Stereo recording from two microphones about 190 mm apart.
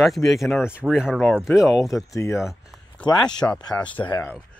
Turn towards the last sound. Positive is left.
turn(degrees=5)  # may be behind; listen again after turning